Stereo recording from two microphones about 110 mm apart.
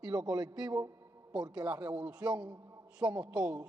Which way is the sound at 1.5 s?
15° right (ahead or behind).